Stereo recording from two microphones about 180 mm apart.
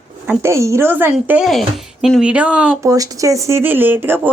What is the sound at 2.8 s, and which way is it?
Speech, 20° right (ahead or behind).